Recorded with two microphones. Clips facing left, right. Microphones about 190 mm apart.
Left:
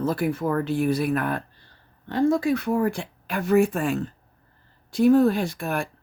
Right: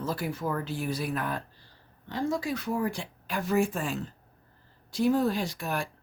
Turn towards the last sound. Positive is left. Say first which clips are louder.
# left 5 dB
turn(degrees=55)  # may be behind; listen again after turning